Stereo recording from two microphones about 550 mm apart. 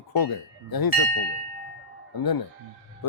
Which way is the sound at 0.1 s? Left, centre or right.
Left.